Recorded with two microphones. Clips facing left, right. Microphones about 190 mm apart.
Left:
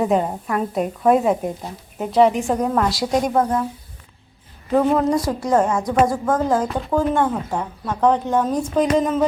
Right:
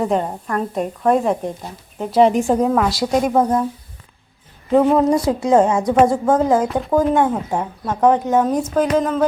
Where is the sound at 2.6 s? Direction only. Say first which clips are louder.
Right 2 dB; 5° right (ahead or behind).